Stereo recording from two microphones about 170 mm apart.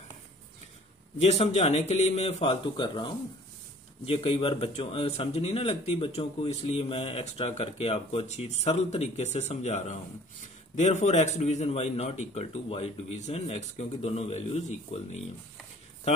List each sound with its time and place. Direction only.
1.2 s a man's voice: 40° left (ahead or behind)